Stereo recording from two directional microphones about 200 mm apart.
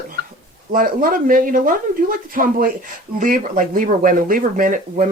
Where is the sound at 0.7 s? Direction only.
45° right (ahead or behind).